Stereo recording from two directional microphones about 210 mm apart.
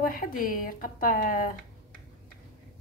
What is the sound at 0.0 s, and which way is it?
Speech, 40° left (ahead or behind).